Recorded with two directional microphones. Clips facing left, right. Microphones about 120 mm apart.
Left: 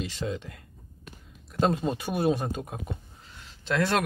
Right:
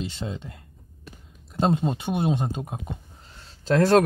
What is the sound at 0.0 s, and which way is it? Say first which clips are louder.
Speech: even; 30° right (ahead or behind).